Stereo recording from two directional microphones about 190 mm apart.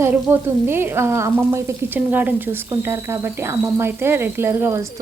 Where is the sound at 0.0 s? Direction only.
10° right (ahead or behind).